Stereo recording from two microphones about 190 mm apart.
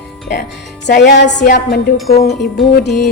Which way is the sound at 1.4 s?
50° left (ahead or behind).